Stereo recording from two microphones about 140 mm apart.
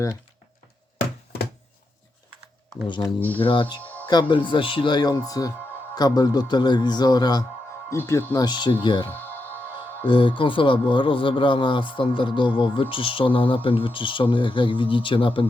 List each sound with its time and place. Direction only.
2.8 s speech: 35° left (ahead or behind)
3.2 s speech: 10° left (ahead or behind)
3.4 s speech: 35° left (ahead or behind)
7.9 s speech: 20° left (ahead or behind)
10.1 s speech: 35° left (ahead or behind)